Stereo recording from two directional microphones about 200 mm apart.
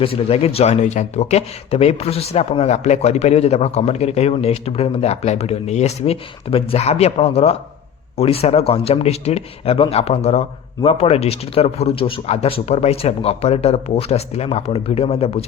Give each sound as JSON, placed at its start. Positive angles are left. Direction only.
{"t": 0.0, "sound": "speech", "side_deg": 30}